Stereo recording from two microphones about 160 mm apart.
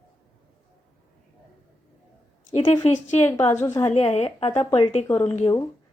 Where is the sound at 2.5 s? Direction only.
40° left (ahead or behind).